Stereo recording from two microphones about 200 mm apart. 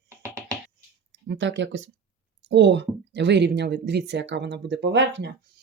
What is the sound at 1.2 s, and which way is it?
Speech, 65° right (ahead or behind).